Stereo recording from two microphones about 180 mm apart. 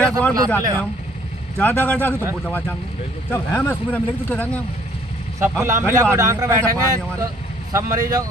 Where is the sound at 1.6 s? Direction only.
10° left (ahead or behind).